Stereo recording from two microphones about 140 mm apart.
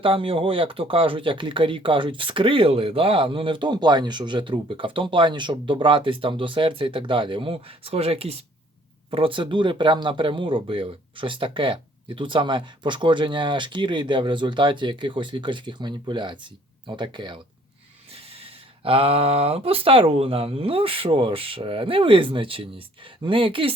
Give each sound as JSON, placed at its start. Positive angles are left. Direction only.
{"t": 0.0, "sound": "speech", "side_deg": -40}
{"t": 18.9, "sound": "speech", "side_deg": -40}